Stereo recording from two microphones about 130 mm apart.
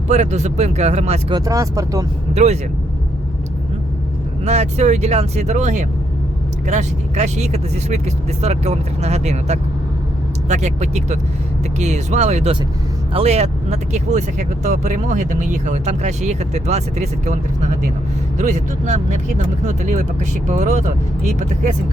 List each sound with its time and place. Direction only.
0.1 s speech: 60° right (ahead or behind)
1.3 s speech: 25° right (ahead or behind)
2.3 s speech: 60° right (ahead or behind)
4.4 s speech: 60° right (ahead or behind)